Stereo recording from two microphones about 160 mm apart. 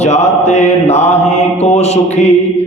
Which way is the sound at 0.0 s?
45° left (ahead or behind).